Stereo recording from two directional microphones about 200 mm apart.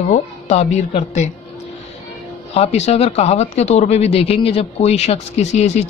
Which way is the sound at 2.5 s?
30° left (ahead or behind).